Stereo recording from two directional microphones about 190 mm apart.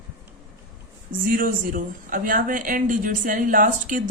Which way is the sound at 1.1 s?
45° right (ahead or behind).